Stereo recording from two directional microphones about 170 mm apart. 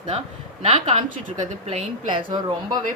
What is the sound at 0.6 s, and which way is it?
Speech, 40° right (ahead or behind).